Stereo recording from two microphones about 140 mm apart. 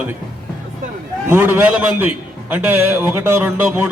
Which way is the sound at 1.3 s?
15° right (ahead or behind).